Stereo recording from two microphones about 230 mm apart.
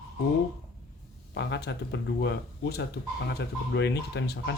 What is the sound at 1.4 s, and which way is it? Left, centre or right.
Speech, left.